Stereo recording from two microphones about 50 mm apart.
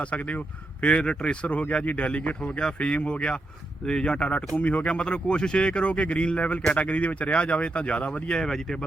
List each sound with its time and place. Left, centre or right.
0.8 s speech: left